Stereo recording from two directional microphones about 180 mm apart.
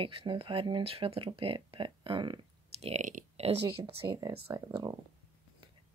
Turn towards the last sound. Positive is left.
turn(degrees=-20)  # may be behind; listen again after turning